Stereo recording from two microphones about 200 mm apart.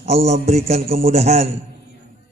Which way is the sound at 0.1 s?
30° right (ahead or behind).